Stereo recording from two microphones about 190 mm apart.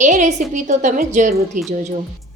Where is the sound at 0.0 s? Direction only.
40° right (ahead or behind).